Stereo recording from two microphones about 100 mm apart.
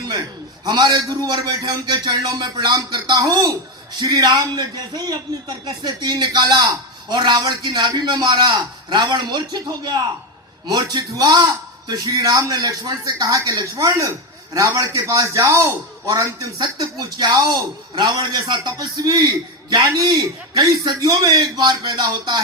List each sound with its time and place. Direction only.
0.6 s a man's voice: 45° right (ahead or behind)